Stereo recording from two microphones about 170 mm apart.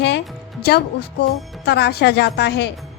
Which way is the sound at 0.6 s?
70° left (ahead or behind).